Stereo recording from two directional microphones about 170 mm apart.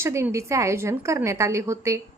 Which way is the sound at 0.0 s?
15° right (ahead or behind).